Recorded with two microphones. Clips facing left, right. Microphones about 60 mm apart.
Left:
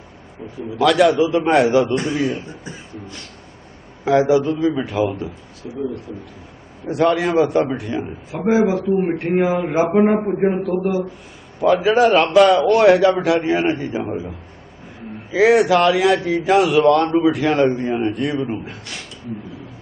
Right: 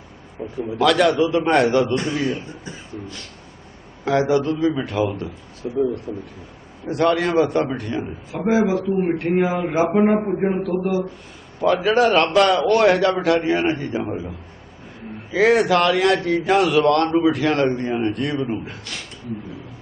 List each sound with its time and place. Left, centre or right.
0.8 s a man's voice: centre
4.0 s a man's voice: centre
5.6 s speech: right
6.1 s speech: right
6.8 s a man's voice: centre
10.6 s a man's voice: left
11.6 s a man's voice: centre
15.3 s a man's voice: centre